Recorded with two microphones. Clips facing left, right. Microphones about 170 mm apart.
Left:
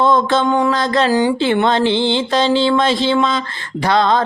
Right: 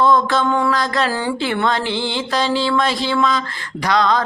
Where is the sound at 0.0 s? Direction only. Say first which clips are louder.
Left 1 dB; 25° left (ahead or behind).